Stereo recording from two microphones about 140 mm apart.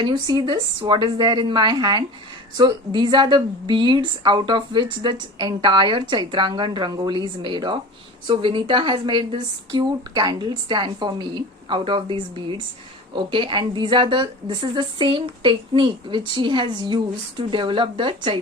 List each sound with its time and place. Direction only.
0.0 s a woman's voice: 30° right (ahead or behind)